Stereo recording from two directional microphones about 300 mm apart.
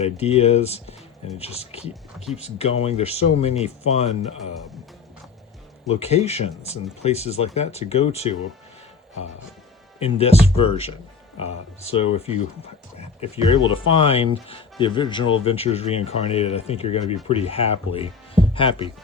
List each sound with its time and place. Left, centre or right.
0.0 s speech: left
6.0 s speech: left
10.0 s speech: centre